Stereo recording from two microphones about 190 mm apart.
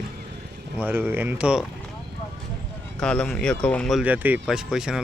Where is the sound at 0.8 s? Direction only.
10° right (ahead or behind).